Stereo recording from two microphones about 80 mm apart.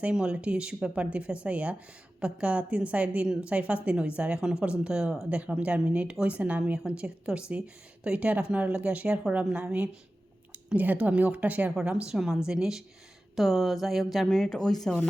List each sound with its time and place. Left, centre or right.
0.0 s a woman's voice: centre
11.7 s a woman's voice: centre